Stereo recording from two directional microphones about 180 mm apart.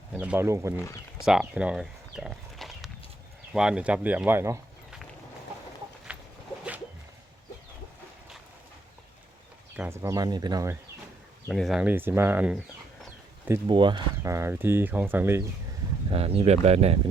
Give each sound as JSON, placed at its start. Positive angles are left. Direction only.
{"t": 0.1, "sound": "speech", "side_deg": -5}
{"t": 1.2, "sound": "walk", "side_deg": -5}
{"t": 3.5, "sound": "speech", "side_deg": -5}
{"t": 6.1, "sound": "a sound", "side_deg": -5}
{"t": 9.7, "sound": "speech", "side_deg": -10}
{"t": 11.4, "sound": "speech", "side_deg": 0}
{"t": 13.7, "sound": "speech", "side_deg": -25}
{"t": 14.2, "sound": "speech", "side_deg": -15}
{"t": 16.0, "sound": "speech", "side_deg": -35}